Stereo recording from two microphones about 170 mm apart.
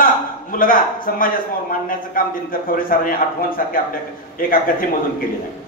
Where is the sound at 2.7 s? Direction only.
55° left (ahead or behind).